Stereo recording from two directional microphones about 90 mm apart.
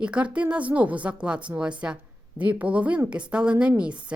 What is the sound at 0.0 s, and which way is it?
Speech, 10° right (ahead or behind).